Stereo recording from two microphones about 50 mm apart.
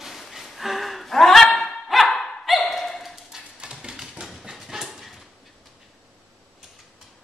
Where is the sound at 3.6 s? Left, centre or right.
Centre.